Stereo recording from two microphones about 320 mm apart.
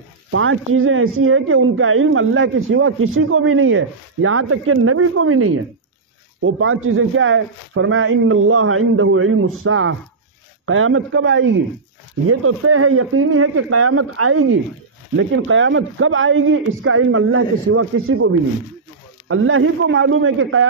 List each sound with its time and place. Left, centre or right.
0.3 s speech: right